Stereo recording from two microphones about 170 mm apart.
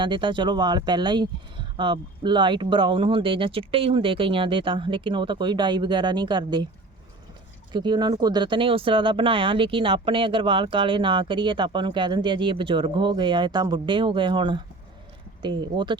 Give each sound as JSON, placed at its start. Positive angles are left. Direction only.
{"t": 0.0, "sound": "speech", "side_deg": -30}
{"t": 7.7, "sound": "speech", "side_deg": -25}